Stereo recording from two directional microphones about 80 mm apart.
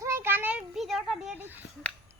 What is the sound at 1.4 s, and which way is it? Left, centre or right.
Speech, right.